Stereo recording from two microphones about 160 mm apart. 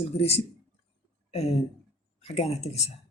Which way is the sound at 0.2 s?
40° left (ahead or behind).